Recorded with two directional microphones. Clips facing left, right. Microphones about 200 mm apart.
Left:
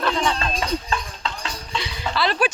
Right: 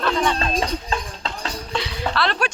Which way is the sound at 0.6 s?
35° right (ahead or behind).